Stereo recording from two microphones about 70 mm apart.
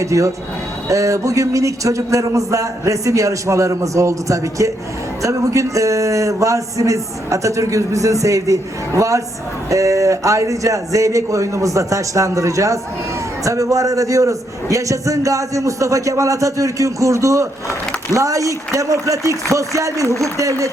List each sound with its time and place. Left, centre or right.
0.0 s a man's voice: right